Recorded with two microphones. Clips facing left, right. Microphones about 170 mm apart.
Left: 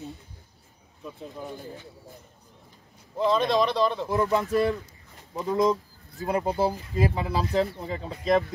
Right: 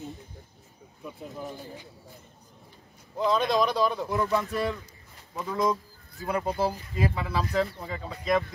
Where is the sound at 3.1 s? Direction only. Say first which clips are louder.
Left 2 dB; centre (ahead or behind).